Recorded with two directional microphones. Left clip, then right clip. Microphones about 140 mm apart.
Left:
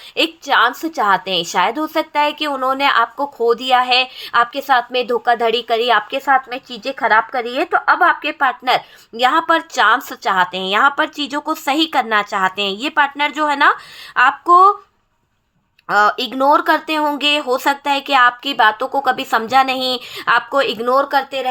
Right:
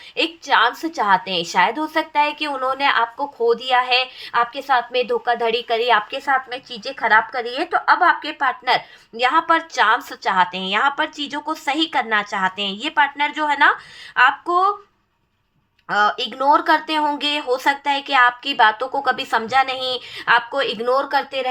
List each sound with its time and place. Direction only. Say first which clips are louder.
0.2 s a woman's voice: left 3 dB; 40° left (ahead or behind)
15.9 s speech: left 4 dB; 40° left (ahead or behind)